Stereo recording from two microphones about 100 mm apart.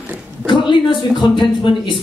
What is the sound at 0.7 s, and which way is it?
Speech, 55° left (ahead or behind).